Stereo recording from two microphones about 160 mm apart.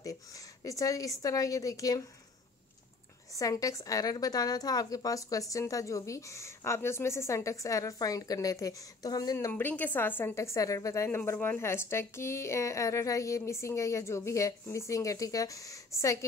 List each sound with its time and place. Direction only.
0.7 s a woman's voice: 20° left (ahead or behind)
3.3 s a woman's voice: 20° left (ahead or behind)
9.5 s a woman's voice: 10° left (ahead or behind)